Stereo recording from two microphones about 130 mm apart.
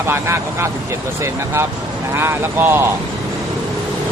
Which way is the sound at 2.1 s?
20° right (ahead or behind).